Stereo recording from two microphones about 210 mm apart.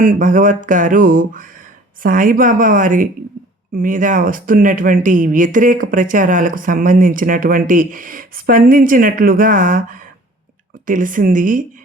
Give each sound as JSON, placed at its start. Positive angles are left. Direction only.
{"t": 0.0, "sound": "speech", "side_deg": -40}